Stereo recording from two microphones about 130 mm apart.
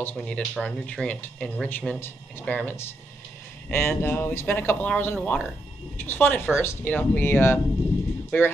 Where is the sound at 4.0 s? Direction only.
15° left (ahead or behind).